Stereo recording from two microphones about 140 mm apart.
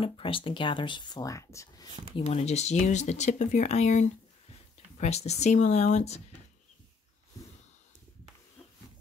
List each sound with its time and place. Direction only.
0.0 s speech: 40° left (ahead or behind); by 1.9 s 20° left (ahead or behind)
2.2 s speech: 55° left (ahead or behind)